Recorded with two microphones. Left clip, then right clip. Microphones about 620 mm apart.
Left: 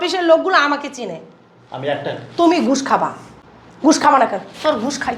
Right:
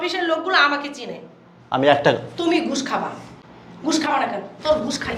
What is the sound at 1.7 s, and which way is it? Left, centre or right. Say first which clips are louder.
Speech: right 7 dB; right.